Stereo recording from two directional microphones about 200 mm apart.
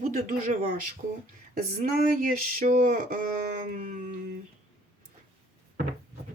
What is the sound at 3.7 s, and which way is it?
Speech, 40° right (ahead or behind).